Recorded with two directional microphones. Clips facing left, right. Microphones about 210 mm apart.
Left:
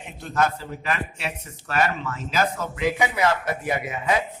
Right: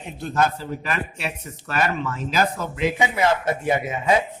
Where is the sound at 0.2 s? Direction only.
35° right (ahead or behind).